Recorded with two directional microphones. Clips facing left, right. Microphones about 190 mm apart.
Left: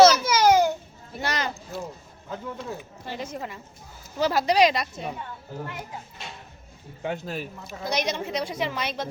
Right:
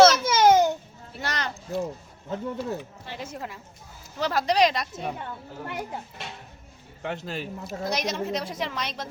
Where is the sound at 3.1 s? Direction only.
5° right (ahead or behind).